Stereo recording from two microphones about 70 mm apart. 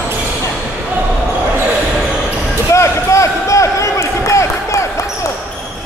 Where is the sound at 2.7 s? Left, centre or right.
Left.